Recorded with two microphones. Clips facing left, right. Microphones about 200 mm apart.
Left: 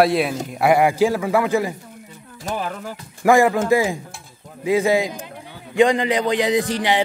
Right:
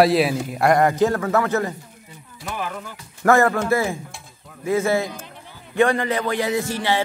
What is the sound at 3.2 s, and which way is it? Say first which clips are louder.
A man's voice: left 2 dB; 15° left (ahead or behind).